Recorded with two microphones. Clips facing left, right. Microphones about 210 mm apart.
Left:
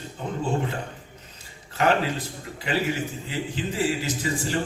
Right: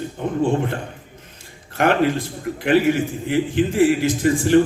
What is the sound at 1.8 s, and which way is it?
A man's voice, 55° right (ahead or behind).